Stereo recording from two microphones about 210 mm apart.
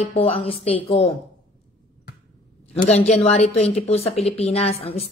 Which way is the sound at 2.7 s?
30° left (ahead or behind).